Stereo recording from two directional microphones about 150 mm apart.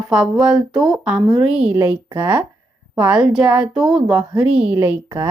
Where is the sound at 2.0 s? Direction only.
30° right (ahead or behind).